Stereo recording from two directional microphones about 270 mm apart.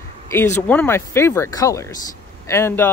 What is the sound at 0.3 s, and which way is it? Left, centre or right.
Speech, centre.